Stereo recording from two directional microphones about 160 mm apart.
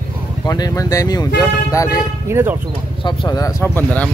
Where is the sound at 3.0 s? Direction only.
25° left (ahead or behind).